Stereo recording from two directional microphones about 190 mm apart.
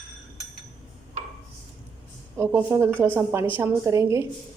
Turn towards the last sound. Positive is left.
turn(degrees=-15)  # may be behind; listen again after turning